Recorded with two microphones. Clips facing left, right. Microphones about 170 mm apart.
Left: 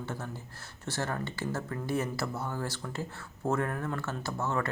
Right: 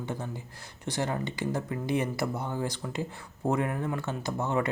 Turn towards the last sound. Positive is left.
turn(degrees=-15)  # may be behind; listen again after turning